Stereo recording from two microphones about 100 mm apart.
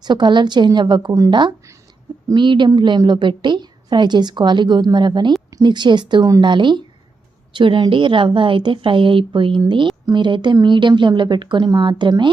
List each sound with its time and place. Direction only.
0.0 s a woman's voice: 50° right (ahead or behind)